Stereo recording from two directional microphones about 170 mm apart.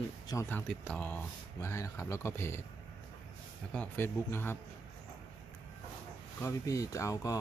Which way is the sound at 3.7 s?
10° left (ahead or behind).